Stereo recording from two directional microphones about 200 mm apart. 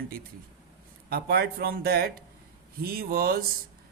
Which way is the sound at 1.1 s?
50° right (ahead or behind).